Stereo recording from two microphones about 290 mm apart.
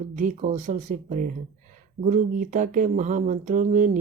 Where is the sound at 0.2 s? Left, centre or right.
Right.